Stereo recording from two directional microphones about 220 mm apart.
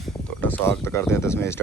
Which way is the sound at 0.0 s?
10° left (ahead or behind).